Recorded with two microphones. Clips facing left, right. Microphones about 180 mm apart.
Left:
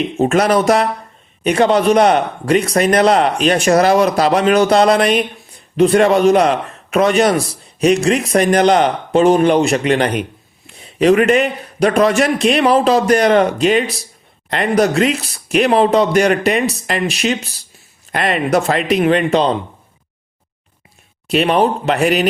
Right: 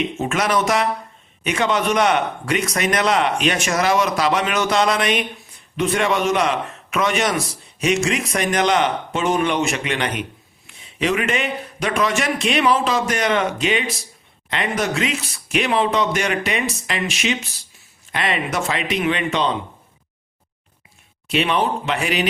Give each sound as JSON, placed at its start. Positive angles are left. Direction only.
{"t": 0.2, "sound": "a man's voice", "side_deg": 35}
{"t": 21.2, "sound": "a man's voice", "side_deg": 40}